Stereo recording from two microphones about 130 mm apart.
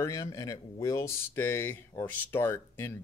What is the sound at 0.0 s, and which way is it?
Speech, 25° left (ahead or behind).